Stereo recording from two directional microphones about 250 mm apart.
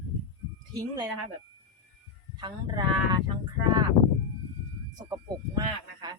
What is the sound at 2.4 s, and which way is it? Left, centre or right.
Speech, centre.